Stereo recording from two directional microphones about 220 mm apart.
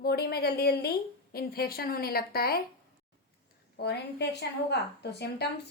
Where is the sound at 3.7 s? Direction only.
50° left (ahead or behind).